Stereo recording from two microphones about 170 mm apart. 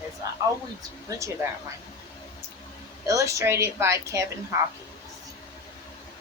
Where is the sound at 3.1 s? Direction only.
20° right (ahead or behind).